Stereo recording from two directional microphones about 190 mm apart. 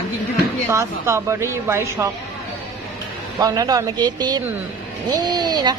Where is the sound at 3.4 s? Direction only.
20° right (ahead or behind).